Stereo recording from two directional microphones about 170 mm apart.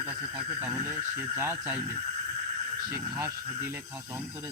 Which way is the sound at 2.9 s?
15° right (ahead or behind).